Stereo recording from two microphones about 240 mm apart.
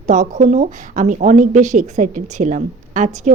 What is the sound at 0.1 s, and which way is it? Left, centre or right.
Speech, right.